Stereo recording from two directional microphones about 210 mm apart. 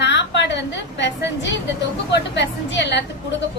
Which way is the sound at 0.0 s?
55° left (ahead or behind).